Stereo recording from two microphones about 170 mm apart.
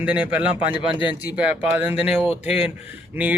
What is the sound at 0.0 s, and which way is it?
A man's voice, 5° right (ahead or behind).